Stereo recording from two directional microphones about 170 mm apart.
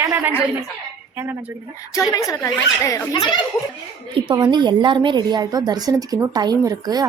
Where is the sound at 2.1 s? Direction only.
20° left (ahead or behind).